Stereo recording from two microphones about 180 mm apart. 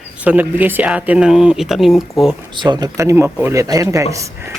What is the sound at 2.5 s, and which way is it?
Speech, 25° right (ahead or behind).